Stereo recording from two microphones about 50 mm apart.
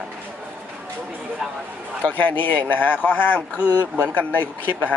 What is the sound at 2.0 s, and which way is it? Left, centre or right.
Speech, left.